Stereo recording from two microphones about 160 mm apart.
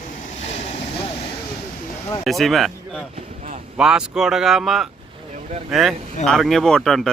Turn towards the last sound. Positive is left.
turn(degrees=0)  # may be behind; listen again after turning